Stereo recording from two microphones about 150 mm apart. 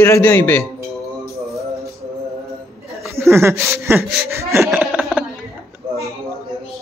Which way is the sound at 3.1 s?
15° right (ahead or behind).